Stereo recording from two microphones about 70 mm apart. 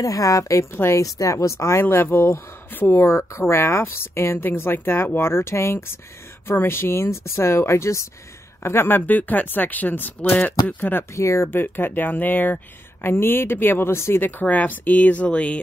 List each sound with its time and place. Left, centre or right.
0.0 s a woman's voice: left
11.1 s a woman's voice: left
11.5 s speech: left
14.4 s speech: left